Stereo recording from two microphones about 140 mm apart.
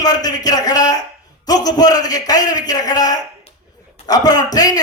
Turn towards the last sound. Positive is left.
turn(degrees=30)  # may be behind; listen again after turning